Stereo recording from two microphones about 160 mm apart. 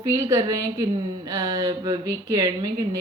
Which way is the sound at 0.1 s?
25° right (ahead or behind).